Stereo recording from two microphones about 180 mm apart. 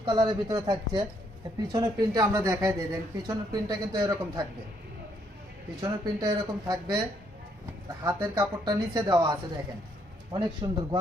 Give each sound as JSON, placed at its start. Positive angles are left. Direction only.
{"t": 0.0, "sound": "speech", "side_deg": -25}
{"t": 5.8, "sound": "speech", "side_deg": -20}
{"t": 8.0, "sound": "speech", "side_deg": -20}